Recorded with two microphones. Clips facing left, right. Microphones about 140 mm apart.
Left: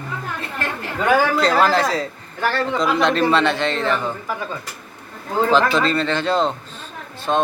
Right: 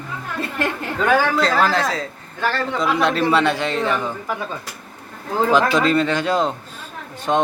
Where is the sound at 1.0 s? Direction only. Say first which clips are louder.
Left 1 dB; centre (ahead or behind).